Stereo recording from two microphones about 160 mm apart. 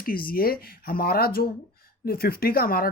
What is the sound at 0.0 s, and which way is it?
Speech, 65° left (ahead or behind).